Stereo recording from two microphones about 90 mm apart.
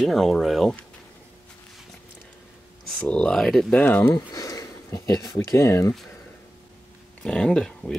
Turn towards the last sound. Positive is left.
turn(degrees=10)  # may be behind; listen again after turning